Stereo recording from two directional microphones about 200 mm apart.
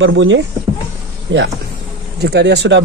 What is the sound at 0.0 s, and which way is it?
Speech, 70° right (ahead or behind).